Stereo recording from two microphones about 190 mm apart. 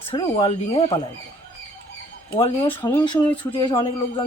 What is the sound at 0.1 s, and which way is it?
Speech, 30° left (ahead or behind).